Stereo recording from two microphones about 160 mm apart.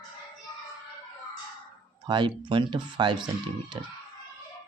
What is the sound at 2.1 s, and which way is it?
Speech, 30° right (ahead or behind).